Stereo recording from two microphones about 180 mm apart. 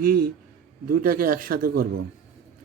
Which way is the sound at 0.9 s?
55° right (ahead or behind).